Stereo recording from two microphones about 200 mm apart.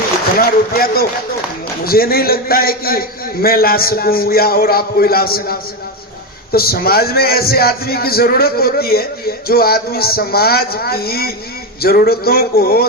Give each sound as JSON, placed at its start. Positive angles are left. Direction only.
{"t": 0.3, "sound": "speech", "side_deg": 45}